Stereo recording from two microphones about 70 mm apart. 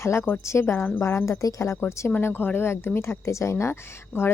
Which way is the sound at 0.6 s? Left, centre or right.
Left.